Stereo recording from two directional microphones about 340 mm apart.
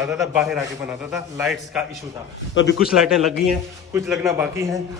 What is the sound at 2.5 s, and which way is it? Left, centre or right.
Speech, left.